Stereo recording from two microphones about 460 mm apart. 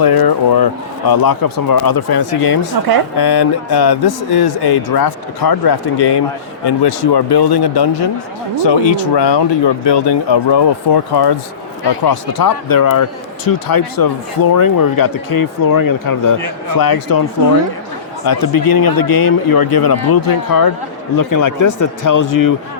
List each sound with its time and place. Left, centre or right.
0.0 s speech: left
18.3 s speech: left